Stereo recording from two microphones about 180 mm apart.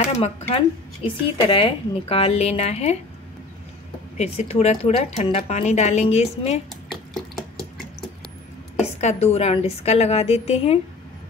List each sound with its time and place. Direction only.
0.0 s speech: 35° left (ahead or behind)
4.2 s speech: 35° left (ahead or behind)
6.9 s a sound: centre (ahead or behind)
8.8 s speech: 35° left (ahead or behind)